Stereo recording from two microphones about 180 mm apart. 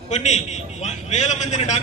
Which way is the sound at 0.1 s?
40° left (ahead or behind).